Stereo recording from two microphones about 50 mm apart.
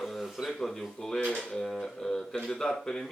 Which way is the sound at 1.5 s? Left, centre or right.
Centre.